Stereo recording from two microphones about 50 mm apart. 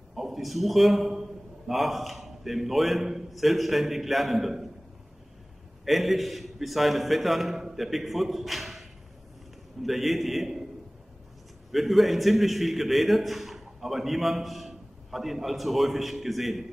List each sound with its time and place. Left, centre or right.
0.1 s a man's voice: centre
5.9 s a man's voice: centre
11.7 s a man's voice: centre